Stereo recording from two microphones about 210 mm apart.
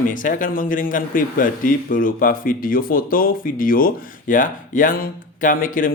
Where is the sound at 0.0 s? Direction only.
40° left (ahead or behind).